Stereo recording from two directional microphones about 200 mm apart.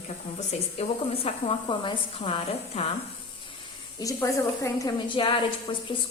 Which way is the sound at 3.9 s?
15° left (ahead or behind).